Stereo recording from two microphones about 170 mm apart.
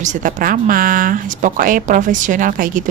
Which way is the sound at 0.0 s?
45° right (ahead or behind).